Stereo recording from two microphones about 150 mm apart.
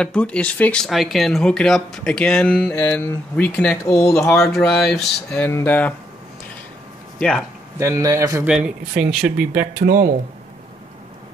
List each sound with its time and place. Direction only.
0.0 s speech: 5° left (ahead or behind)
4.4 s speech: centre (ahead or behind)
5.4 s speech: 15° left (ahead or behind)
7.2 s speech: 5° left (ahead or behind)
7.8 s speech: 20° right (ahead or behind)
9.1 s speech: 5° right (ahead or behind)
9.8 s speech: 65° right (ahead or behind)